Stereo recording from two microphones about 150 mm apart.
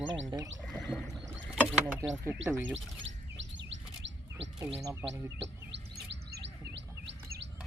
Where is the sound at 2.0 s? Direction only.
25° right (ahead or behind).